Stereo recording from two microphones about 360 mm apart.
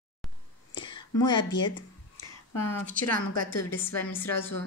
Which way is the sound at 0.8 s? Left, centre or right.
Centre.